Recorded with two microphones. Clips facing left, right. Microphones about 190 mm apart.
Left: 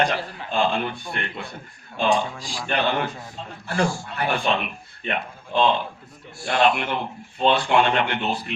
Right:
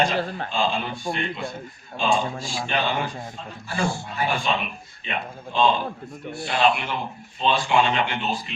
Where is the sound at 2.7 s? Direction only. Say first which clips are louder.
Left 3 dB; 60° left (ahead or behind).